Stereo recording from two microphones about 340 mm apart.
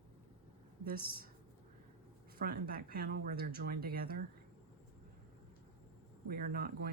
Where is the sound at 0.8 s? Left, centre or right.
Right.